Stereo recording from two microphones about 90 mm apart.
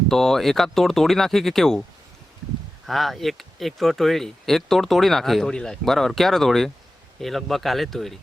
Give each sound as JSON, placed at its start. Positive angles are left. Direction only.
{"t": 0.1, "sound": "speech", "side_deg": 5}
{"t": 2.8, "sound": "speech", "side_deg": 0}